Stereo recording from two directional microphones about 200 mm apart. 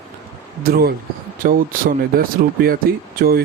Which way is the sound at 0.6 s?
50° right (ahead or behind).